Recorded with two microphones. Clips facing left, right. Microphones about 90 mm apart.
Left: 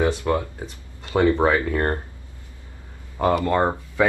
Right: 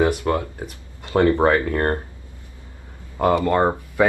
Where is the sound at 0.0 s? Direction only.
15° right (ahead or behind).